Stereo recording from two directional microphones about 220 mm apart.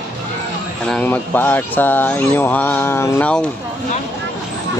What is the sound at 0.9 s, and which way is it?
Speech, 10° left (ahead or behind).